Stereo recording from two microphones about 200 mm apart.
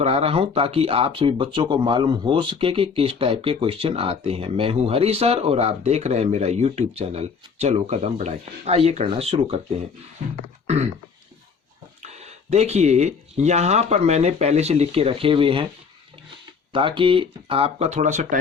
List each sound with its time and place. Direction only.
0.0 s speech: 30° right (ahead or behind)
12.0 s speech: 35° right (ahead or behind)
16.7 s speech: 25° right (ahead or behind)